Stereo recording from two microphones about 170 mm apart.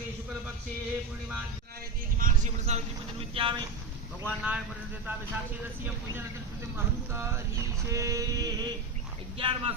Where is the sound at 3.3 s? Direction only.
30° right (ahead or behind).